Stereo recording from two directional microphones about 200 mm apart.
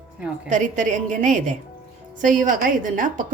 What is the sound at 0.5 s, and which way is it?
A woman's voice, 40° right (ahead or behind).